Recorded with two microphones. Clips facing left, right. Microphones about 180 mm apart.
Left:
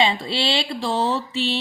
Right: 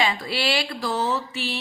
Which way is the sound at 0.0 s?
25° left (ahead or behind).